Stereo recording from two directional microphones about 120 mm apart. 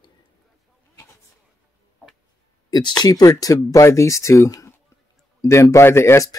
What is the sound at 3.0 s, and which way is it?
Speech, 30° left (ahead or behind).